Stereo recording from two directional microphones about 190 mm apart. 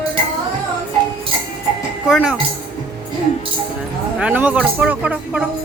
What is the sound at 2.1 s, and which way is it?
Speech, 5° right (ahead or behind).